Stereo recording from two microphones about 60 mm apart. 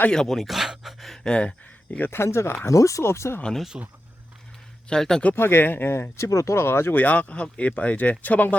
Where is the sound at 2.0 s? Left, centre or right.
Left.